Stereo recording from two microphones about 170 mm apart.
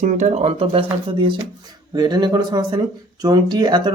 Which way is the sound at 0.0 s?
45° right (ahead or behind).